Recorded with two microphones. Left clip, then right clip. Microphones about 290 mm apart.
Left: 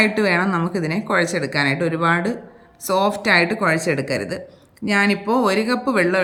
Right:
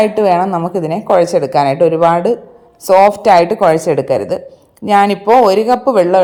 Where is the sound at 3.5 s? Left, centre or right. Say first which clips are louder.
Right 9 dB; right.